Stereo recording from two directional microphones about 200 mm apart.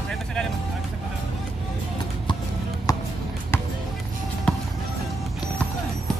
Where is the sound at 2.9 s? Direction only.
20° left (ahead or behind).